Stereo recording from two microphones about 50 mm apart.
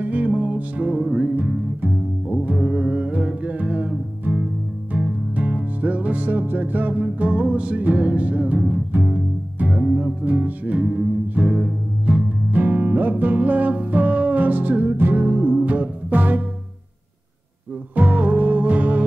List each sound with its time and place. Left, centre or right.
0.0 s music: right
1.0 s music: centre
2.2 s music: right
2.5 s music: centre; by 4.5 s right
4.9 s music: right
8.5 s music: centre
9.0 s music: right
17.9 s music: right